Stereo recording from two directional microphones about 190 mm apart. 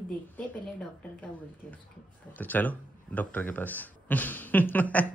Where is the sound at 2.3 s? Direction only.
10° left (ahead or behind).